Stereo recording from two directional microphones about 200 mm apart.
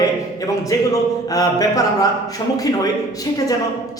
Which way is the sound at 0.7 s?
20° left (ahead or behind).